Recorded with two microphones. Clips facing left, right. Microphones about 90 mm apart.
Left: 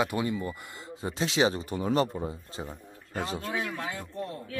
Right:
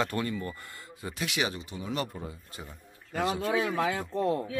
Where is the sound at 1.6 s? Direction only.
45° left (ahead or behind).